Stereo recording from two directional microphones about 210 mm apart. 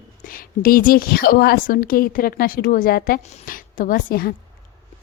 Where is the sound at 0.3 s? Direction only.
45° left (ahead or behind).